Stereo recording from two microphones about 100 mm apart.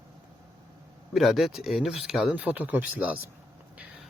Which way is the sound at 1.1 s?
Centre (ahead or behind).